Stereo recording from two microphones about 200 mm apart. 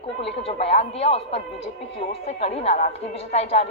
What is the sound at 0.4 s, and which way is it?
Speech, 30° left (ahead or behind).